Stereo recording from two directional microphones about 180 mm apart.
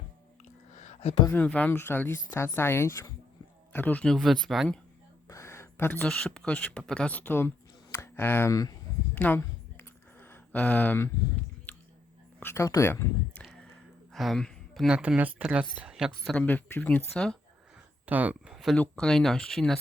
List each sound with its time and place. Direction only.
0.4 s a sound: 40° left (ahead or behind)
1.3 s speech: 10° left (ahead or behind)
5.3 s speech: 15° left (ahead or behind)
9.1 s a sound: 10° left (ahead or behind)
12.4 s speech: 15° left (ahead or behind)
14.1 s speech: centre (ahead or behind)
18.0 s speech: 10° right (ahead or behind)